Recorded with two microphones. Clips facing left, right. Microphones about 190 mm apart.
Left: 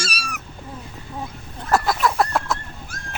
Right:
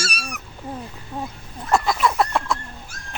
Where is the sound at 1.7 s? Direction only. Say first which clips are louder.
Even; centre (ahead or behind).